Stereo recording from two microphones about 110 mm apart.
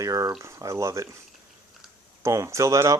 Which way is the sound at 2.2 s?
25° right (ahead or behind).